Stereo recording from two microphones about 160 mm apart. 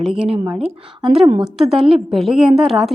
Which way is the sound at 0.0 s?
5° right (ahead or behind).